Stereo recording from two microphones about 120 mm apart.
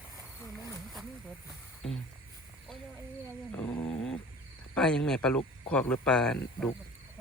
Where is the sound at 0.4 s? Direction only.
25° left (ahead or behind).